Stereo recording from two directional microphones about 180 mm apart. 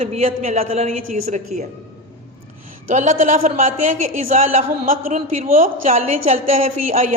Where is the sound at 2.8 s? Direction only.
45° right (ahead or behind).